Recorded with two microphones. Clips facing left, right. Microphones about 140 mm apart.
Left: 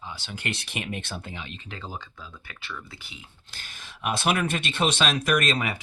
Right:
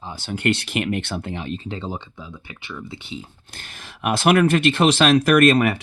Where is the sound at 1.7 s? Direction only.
25° right (ahead or behind).